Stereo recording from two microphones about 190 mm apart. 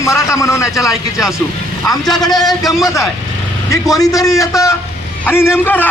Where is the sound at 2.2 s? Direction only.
20° left (ahead or behind).